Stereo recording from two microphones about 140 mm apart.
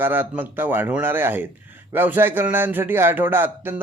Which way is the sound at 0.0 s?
15° right (ahead or behind).